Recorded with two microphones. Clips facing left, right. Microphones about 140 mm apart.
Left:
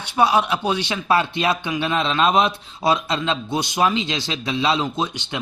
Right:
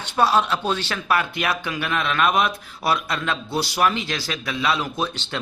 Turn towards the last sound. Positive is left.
turn(degrees=15)  # may be behind; listen again after turning